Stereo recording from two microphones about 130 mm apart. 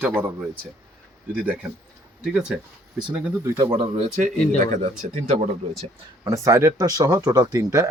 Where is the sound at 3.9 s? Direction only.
65° right (ahead or behind).